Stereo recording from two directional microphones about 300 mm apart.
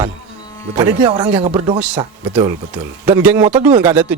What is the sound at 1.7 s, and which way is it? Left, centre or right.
A man's voice, centre.